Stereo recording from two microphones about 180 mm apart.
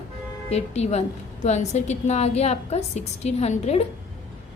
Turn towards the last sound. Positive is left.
turn(degrees=35)  # may be behind; listen again after turning